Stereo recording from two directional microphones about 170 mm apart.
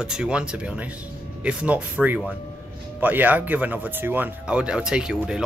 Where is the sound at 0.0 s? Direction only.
5° right (ahead or behind).